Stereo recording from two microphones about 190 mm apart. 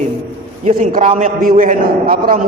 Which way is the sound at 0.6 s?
45° right (ahead or behind).